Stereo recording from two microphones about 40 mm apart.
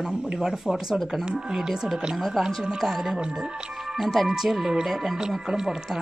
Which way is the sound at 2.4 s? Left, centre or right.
Centre.